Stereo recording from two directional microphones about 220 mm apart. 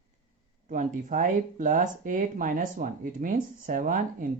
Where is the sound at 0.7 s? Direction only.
35° right (ahead or behind).